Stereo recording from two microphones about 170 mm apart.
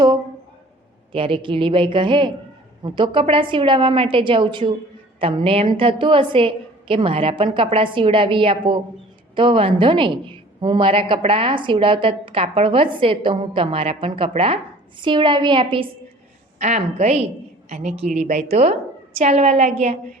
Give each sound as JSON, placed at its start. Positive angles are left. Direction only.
{"t": 1.1, "sound": "a woman's voice", "side_deg": -30}
{"t": 16.6, "sound": "a woman's voice", "side_deg": -45}